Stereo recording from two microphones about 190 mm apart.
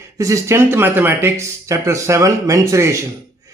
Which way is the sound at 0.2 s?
15° right (ahead or behind).